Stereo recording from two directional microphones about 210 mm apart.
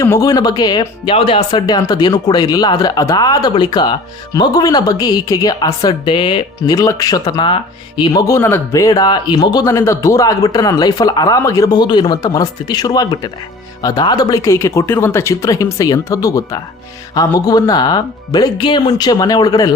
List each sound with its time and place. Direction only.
0.0 s speech: 15° left (ahead or behind)